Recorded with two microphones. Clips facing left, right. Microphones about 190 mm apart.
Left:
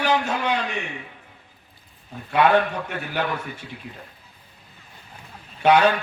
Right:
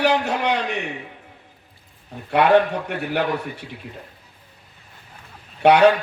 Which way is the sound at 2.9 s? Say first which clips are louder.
Right 4 dB; 65° right (ahead or behind).